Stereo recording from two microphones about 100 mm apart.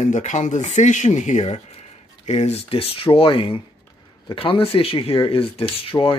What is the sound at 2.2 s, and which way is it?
Speech, 90° left.